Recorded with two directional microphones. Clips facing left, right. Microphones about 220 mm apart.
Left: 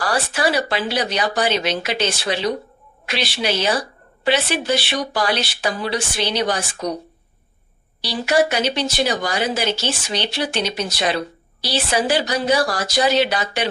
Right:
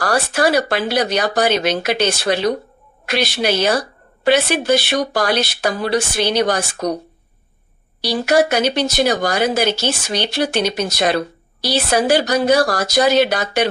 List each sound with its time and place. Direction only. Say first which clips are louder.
0.0 s speech: right 4 dB; 45° right (ahead or behind)
8.0 s speech: right 3 dB; 45° right (ahead or behind)